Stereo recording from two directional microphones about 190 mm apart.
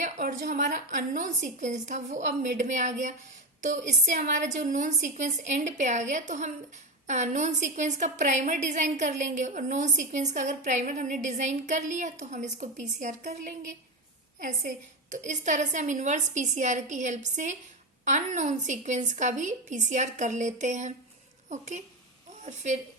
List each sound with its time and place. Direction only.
0.0 s a woman's voice: 45° right (ahead or behind)